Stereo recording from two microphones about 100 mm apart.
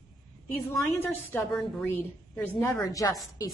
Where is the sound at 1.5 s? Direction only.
5° left (ahead or behind).